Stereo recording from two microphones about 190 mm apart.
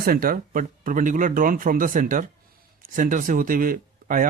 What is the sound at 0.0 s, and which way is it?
Speech, 50° right (ahead or behind).